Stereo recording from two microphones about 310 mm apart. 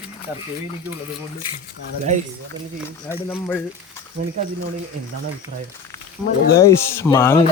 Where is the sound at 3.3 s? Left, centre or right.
Centre.